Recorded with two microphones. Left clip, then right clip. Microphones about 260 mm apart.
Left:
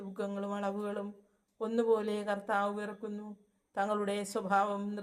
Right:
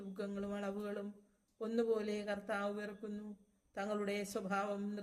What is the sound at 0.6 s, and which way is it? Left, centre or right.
Speech, left.